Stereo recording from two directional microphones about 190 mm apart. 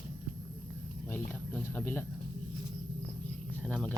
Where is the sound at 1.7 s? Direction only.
10° left (ahead or behind).